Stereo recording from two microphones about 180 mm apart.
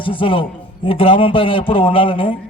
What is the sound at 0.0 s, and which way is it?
A man's voice, 30° left (ahead or behind).